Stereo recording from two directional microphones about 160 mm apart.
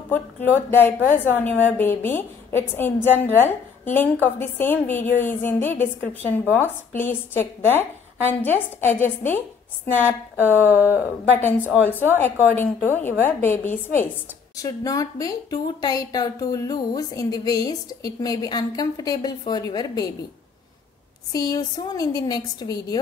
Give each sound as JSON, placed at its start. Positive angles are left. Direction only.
{"t": 0.1, "sound": "a woman's voice", "side_deg": 15}
{"t": 11.3, "sound": "a woman's voice", "side_deg": 10}
{"t": 21.3, "sound": "speech", "side_deg": 25}